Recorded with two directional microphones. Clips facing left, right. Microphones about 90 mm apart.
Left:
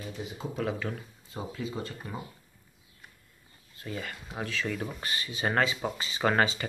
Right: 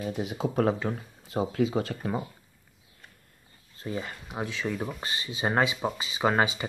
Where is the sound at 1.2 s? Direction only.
85° right.